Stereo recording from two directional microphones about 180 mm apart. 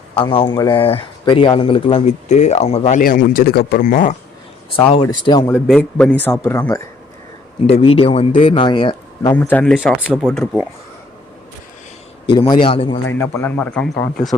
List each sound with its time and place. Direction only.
0.1 s speech: 30° left (ahead or behind); by 4.2 s 45° left (ahead or behind)
4.9 s a man's voice: 25° left (ahead or behind)
5.5 s speech: centre (ahead or behind)
7.7 s a man's voice: 30° left (ahead or behind)
9.4 s speech: 5° left (ahead or behind)
12.6 s a man's voice: 30° left (ahead or behind)
13.1 s speech: 15° left (ahead or behind)